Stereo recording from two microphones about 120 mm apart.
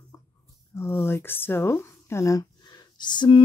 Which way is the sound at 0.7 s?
20° left (ahead or behind).